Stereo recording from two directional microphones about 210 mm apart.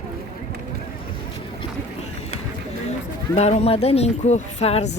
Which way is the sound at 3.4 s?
30° left (ahead or behind).